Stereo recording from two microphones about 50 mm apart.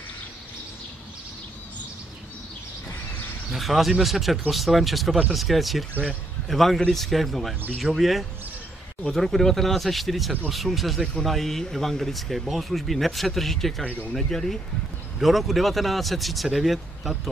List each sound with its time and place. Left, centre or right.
3.5 s speech: centre